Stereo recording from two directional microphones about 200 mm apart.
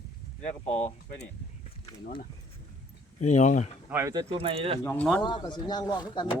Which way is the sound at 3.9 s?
15° right (ahead or behind).